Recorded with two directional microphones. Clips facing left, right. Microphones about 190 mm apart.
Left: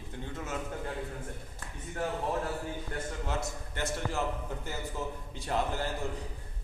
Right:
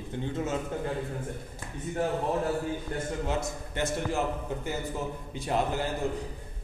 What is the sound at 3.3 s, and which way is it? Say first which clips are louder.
A man's voice: right 4 dB; 20° right (ahead or behind).